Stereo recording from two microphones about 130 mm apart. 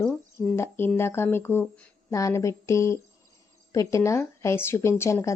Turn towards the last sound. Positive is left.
turn(degrees=25)  # may be behind; listen again after turning